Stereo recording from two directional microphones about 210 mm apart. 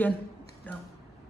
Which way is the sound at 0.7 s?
5° left (ahead or behind).